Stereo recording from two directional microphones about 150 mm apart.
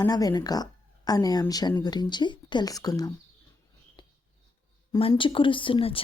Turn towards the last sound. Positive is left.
turn(degrees=35)  # may be behind; listen again after turning